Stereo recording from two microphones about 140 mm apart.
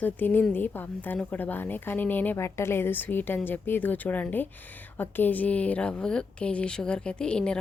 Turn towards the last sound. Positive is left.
turn(degrees=5)  # may be behind; listen again after turning